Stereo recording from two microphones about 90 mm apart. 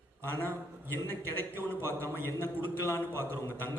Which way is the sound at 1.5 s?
20° left (ahead or behind).